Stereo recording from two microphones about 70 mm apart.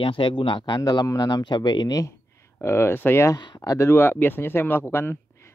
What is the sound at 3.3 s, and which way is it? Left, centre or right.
Speech, left.